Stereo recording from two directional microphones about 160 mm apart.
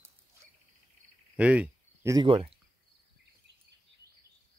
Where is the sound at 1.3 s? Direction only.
5° right (ahead or behind).